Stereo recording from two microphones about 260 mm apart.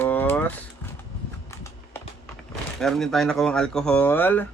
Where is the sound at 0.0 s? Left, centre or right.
Centre.